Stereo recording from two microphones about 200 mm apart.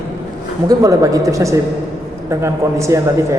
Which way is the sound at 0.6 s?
15° right (ahead or behind).